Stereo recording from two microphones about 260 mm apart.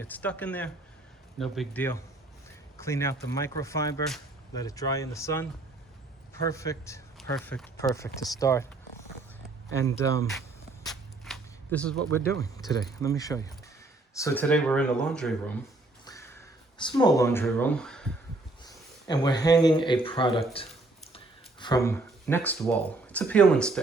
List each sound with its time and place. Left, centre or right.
0.1 s speech: centre
9.7 s speech: centre
10.8 s cap gun: centre
12.1 s speech: centre
16.0 s a sound: centre
18.6 s speech: centre
21.6 s speech: centre